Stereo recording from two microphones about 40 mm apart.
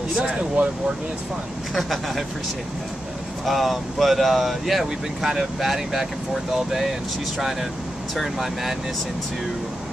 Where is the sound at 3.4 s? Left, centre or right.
Centre.